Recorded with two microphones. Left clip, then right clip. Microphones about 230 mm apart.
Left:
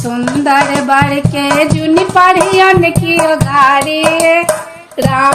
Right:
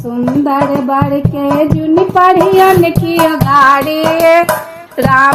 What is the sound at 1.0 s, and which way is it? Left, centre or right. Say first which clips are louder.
Music: left 2 dB; left.